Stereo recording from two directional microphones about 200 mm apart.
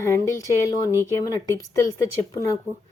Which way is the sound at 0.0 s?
15° left (ahead or behind).